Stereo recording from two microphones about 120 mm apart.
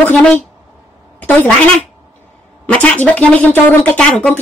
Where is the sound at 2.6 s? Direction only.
10° left (ahead or behind).